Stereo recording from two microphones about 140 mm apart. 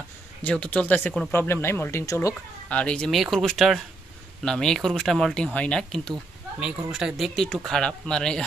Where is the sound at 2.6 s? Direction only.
10° left (ahead or behind).